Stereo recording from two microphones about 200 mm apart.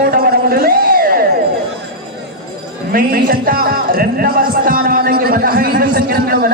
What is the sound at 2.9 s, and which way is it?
A man's voice, 45° right (ahead or behind).